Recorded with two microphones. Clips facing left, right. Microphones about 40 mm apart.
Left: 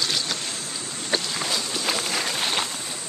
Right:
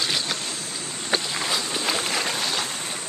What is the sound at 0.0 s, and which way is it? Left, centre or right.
Vehicle, centre.